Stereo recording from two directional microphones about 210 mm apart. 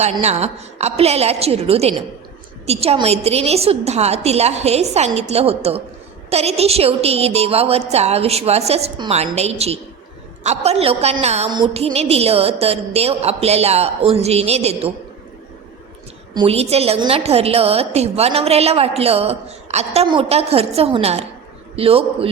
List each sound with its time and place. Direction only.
0.0 s a woman's voice: 30° right (ahead or behind)
16.3 s a woman's voice: 25° right (ahead or behind)